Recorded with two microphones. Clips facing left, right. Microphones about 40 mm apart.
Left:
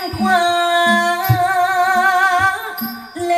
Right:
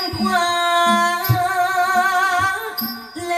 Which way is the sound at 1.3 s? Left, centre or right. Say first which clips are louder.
Left 3 dB; centre.